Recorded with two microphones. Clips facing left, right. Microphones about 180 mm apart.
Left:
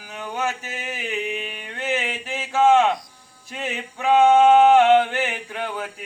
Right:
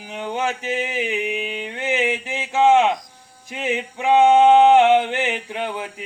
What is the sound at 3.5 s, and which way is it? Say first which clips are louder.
Male singing: right 5 dB; 15° right (ahead or behind).